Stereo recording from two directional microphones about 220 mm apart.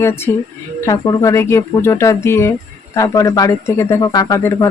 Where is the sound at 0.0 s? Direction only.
10° left (ahead or behind).